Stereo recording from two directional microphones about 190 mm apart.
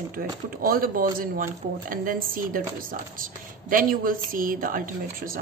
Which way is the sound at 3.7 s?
45° right (ahead or behind).